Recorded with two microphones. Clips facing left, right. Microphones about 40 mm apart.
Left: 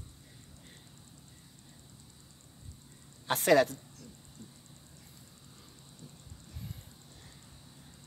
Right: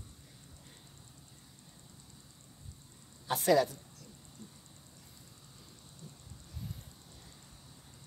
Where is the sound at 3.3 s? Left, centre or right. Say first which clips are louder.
Left 3 dB; left.